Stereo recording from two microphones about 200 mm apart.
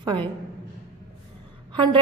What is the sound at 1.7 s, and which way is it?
Speech, 25° right (ahead or behind).